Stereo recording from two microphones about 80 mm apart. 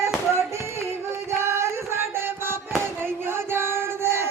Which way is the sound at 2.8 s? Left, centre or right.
Right.